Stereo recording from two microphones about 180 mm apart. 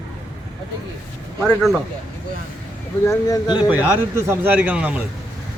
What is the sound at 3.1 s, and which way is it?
Speech, 20° left (ahead or behind).